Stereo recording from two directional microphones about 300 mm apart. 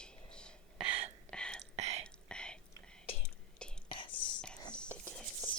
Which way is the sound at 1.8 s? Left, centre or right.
Right.